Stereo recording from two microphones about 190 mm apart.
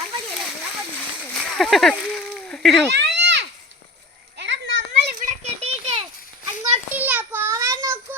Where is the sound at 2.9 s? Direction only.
65° right (ahead or behind).